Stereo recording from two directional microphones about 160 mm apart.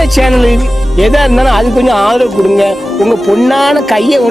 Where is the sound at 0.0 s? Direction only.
Centre (ahead or behind).